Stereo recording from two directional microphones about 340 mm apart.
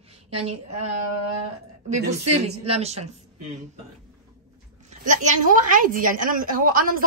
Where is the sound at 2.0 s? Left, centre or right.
Centre.